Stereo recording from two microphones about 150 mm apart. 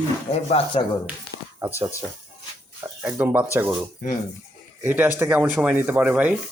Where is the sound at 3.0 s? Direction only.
10° right (ahead or behind).